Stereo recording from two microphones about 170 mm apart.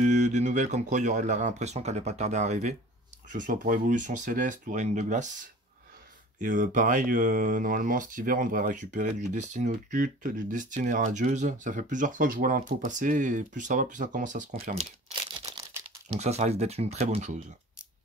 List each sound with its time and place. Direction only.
0.0 s speech: 45° right (ahead or behind)
6.4 s speech: 50° right (ahead or behind)
16.2 s speech: 40° right (ahead or behind)